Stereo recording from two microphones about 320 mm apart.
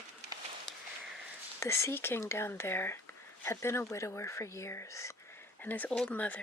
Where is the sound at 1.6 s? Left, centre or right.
Centre.